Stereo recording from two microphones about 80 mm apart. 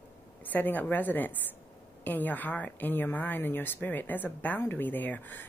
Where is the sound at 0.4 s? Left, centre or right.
Left.